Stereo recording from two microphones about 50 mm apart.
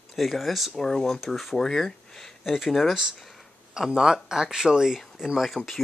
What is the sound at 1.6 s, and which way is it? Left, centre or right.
Speech, centre.